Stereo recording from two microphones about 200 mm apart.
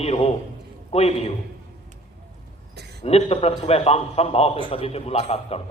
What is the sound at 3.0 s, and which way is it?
A man's voice, 30° left (ahead or behind).